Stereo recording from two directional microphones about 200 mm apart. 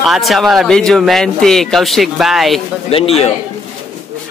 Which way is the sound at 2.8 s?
30° left (ahead or behind).